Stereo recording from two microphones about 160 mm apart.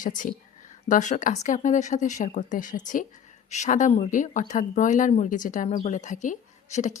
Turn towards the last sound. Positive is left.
turn(degrees=45)  # may be behind; listen again after turning